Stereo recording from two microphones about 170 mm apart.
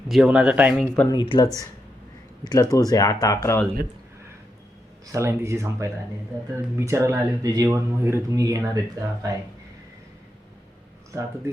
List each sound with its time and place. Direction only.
0.1 s speech: 5° right (ahead or behind)
1.1 s speech: 25° left (ahead or behind)
5.1 s speech: 15° right (ahead or behind)